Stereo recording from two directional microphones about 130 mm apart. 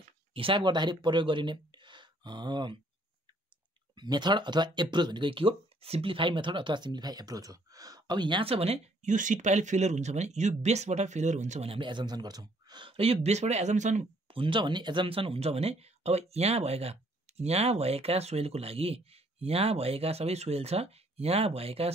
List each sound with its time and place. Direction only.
0.3 s speech: 45° right (ahead or behind)
3.9 s speech: 35° right (ahead or behind); by 11.7 s 60° right (ahead or behind)
11.7 s speech: 40° right (ahead or behind); by 14.0 s 65° right (ahead or behind)
14.2 s speech: 40° right (ahead or behind)